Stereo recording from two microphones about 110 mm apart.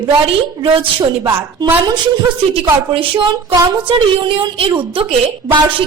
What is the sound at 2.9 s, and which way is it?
Speech, 55° right (ahead or behind).